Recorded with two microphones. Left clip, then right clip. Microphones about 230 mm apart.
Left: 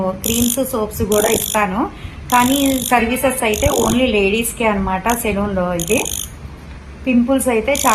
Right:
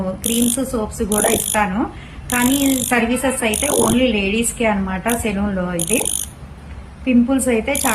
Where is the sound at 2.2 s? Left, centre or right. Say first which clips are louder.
Left 4 dB; centre.